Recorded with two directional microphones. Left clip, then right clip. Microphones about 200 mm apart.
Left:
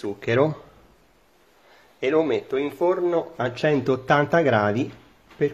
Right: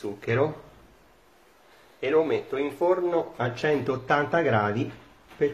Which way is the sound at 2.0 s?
50° left (ahead or behind).